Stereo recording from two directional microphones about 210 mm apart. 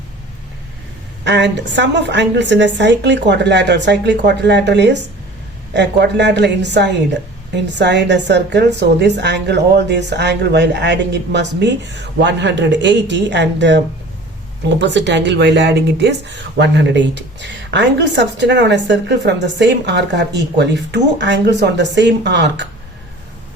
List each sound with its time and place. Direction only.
1.2 s speech: 55° right (ahead or behind)